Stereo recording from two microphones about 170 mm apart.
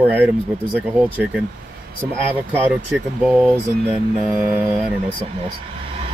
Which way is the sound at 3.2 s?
5° right (ahead or behind).